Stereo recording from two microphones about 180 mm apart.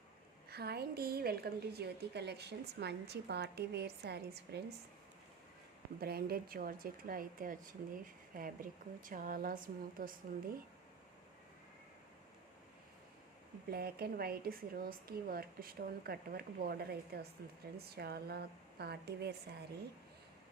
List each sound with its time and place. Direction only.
0.5 s a woman's voice: 60° right (ahead or behind)
6.0 s speech: 60° right (ahead or behind)
13.7 s a woman's voice: 60° right (ahead or behind)